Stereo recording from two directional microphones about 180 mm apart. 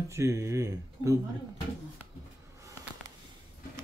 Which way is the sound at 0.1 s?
15° right (ahead or behind).